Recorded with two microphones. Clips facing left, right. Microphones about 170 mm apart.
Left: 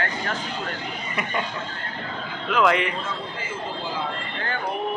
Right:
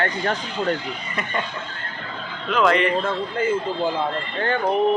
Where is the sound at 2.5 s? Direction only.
5° left (ahead or behind).